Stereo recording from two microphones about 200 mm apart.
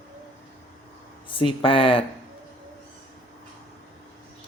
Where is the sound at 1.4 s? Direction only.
25° left (ahead or behind).